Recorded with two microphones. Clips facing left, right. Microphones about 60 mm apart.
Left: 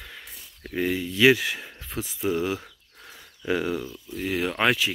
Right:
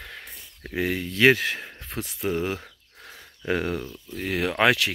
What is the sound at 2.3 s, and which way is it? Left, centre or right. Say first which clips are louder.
Speech: left 1 dB; right.